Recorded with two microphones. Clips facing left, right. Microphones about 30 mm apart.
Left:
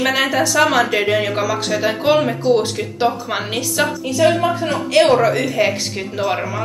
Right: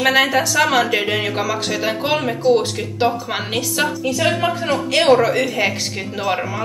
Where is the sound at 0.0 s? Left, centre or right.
Centre.